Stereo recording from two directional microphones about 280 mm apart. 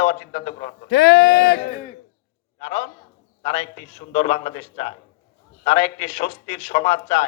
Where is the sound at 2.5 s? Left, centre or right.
Left.